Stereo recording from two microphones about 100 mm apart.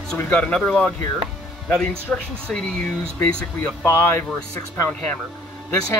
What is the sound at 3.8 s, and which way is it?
Speech, 25° left (ahead or behind).